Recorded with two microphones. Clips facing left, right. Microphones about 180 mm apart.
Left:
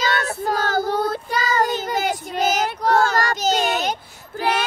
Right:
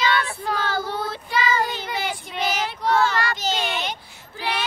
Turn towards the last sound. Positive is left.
turn(degrees=45)  # may be behind; listen again after turning